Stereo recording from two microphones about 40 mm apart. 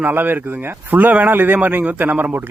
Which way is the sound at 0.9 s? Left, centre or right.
Right.